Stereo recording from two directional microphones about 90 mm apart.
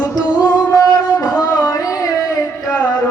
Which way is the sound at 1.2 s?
45° left (ahead or behind).